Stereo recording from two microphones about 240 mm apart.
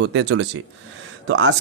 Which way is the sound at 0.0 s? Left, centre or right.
Right.